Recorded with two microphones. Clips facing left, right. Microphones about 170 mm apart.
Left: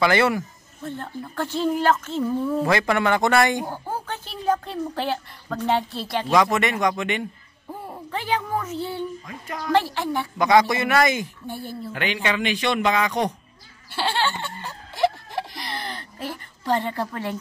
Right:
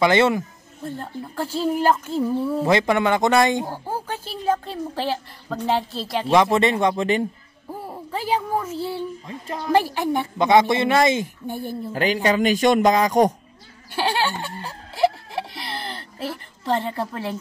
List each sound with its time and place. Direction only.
0.0 s speech: 20° right (ahead or behind)
1.3 s a woman's voice: 5° right (ahead or behind)
2.6 s speech: 25° right (ahead or behind)
3.6 s a woman's voice: 5° right (ahead or behind)
6.2 s speech: 30° right (ahead or behind)
7.8 s a sound: 5° right (ahead or behind)
8.4 s speech: 10° right (ahead or behind)
9.2 s speech: 25° right (ahead or behind)
9.7 s speech: 10° right (ahead or behind)
11.9 s speech: 35° right (ahead or behind)
13.9 s a sound: 10° right (ahead or behind)
15.3 s a sound: 5° right (ahead or behind)
16.6 s speech: centre (ahead or behind)